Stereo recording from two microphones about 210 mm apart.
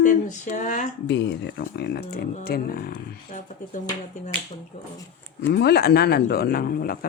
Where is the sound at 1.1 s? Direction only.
55° left (ahead or behind).